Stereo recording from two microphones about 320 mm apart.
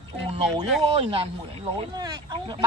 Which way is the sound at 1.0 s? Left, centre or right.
Centre.